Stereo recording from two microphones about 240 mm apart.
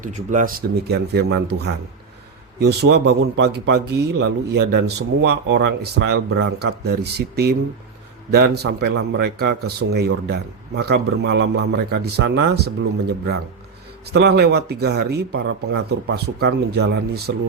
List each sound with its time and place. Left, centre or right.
0.0 s a man's voice: right